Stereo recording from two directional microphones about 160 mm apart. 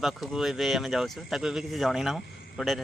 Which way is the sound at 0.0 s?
Centre (ahead or behind).